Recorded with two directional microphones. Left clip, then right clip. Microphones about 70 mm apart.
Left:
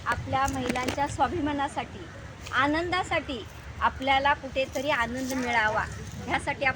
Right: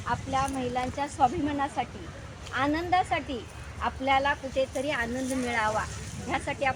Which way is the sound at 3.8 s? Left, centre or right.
Right.